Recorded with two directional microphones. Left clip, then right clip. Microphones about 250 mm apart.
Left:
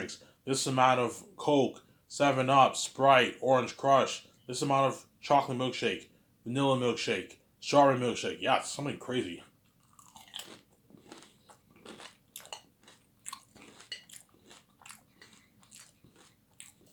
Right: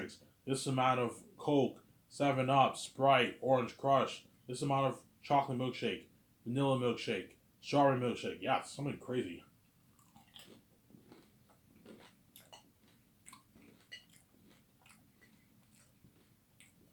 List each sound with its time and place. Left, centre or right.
0.0 s speech: centre
11.8 s biting: left